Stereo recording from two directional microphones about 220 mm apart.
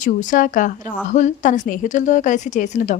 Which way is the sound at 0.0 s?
35° left (ahead or behind).